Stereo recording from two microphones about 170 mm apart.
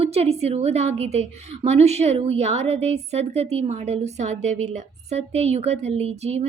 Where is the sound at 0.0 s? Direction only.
35° right (ahead or behind).